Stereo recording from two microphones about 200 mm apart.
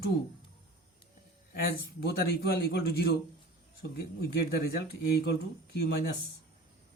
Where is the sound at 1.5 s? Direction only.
55° left (ahead or behind).